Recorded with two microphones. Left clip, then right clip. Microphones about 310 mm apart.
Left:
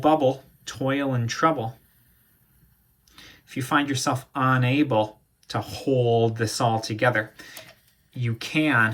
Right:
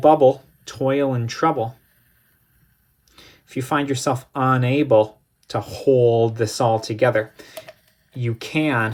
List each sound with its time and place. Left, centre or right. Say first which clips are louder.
0.0 s speech: right 7 dB; right
3.1 s speech: right 4 dB; centre